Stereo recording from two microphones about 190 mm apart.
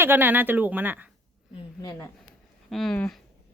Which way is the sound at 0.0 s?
10° right (ahead or behind).